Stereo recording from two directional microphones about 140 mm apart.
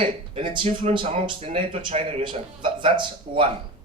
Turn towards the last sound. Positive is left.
turn(degrees=-35)  # may be behind; listen again after turning